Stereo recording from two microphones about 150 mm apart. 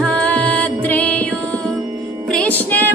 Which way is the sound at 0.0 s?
10° left (ahead or behind).